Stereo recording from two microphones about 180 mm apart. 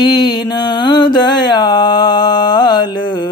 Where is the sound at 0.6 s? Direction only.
25° left (ahead or behind).